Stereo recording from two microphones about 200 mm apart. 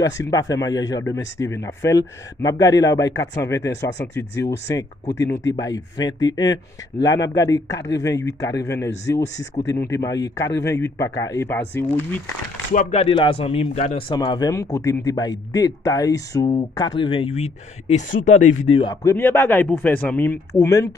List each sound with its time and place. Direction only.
0.0 s speech: 15° left (ahead or behind)
12.7 s speech: 30° left (ahead or behind)
19.0 s speech: 10° left (ahead or behind)